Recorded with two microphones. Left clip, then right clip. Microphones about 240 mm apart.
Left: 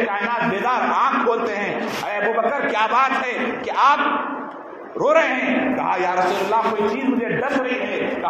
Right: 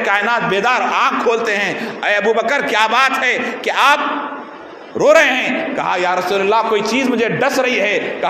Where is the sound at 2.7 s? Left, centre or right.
Right.